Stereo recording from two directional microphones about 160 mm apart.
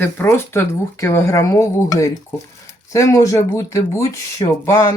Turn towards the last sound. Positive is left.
turn(degrees=15)  # may be behind; listen again after turning